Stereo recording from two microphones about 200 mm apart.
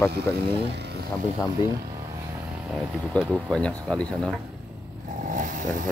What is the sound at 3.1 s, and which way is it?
Speech, 5° left (ahead or behind).